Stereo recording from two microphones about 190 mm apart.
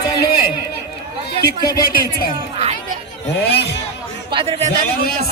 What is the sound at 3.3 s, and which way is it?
Speech, 65° left (ahead or behind).